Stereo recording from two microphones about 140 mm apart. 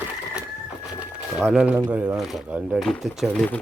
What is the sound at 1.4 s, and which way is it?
Speech, 5° right (ahead or behind).